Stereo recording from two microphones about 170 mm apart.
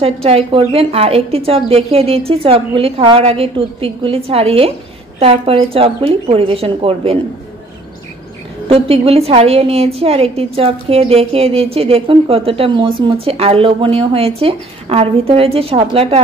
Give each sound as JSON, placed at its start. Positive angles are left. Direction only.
{"t": 0.0, "sound": "a woman's voice", "side_deg": -35}
{"t": 8.6, "sound": "a woman's voice", "side_deg": -35}